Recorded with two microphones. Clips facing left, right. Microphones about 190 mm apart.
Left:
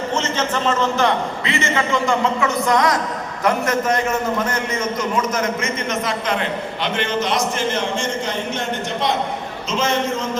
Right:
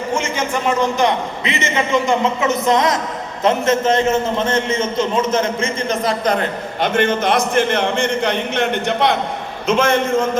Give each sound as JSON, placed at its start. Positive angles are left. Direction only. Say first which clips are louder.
{"t": 0.1, "sound": "a man's voice", "louder": "right 3 dB", "side_deg": -10}